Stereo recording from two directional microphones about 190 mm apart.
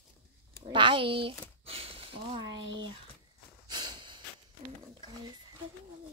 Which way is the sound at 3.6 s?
20° right (ahead or behind).